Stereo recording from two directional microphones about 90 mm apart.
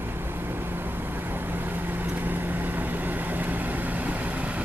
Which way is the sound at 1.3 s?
20° right (ahead or behind).